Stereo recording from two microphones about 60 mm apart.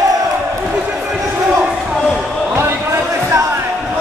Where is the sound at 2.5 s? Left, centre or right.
Right.